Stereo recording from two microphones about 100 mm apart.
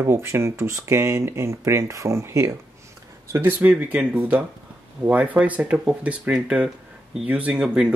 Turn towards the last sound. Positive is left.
turn(degrees=-10)  # may be behind; listen again after turning